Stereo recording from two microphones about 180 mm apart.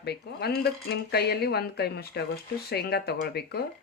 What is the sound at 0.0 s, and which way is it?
Speech, 65° left (ahead or behind).